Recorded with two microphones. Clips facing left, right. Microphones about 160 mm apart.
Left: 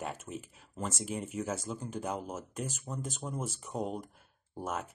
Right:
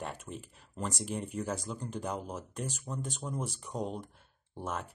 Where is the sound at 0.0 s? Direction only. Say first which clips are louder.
Left 1 dB; 5° left (ahead or behind).